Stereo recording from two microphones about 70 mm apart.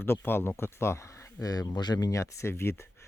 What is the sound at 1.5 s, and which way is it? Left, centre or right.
Speech, left.